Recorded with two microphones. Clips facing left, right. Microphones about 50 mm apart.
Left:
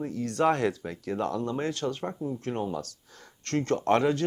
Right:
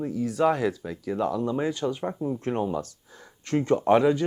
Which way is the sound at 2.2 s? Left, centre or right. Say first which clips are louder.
Right 4 dB; right.